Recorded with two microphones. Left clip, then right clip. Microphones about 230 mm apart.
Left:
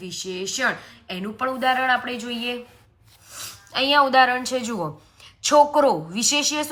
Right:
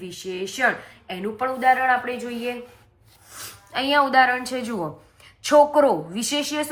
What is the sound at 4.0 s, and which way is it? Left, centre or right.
A woman's voice, centre.